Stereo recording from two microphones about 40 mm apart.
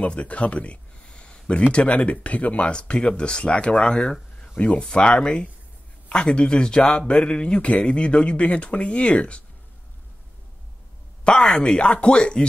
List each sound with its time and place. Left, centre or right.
0.0 s speech: left
11.4 s speech: left